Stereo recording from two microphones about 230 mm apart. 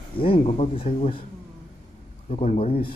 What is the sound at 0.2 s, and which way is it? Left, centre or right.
Speech, left.